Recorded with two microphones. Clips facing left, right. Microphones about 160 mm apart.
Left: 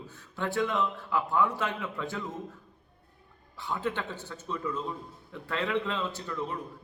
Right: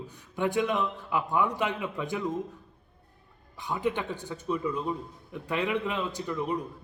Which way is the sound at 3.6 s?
15° right (ahead or behind).